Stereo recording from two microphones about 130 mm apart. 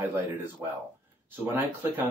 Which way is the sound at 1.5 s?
15° right (ahead or behind).